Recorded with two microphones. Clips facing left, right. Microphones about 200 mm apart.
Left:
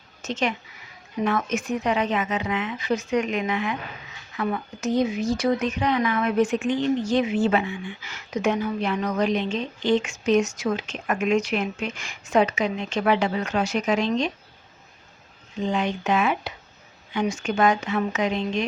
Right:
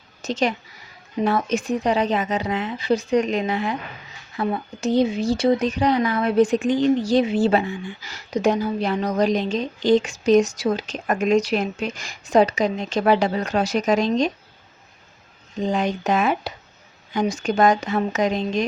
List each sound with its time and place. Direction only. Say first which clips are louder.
0.2 s a woman's voice: right 4 dB; 35° right (ahead or behind)
15.6 s speech: right 3 dB; 40° right (ahead or behind)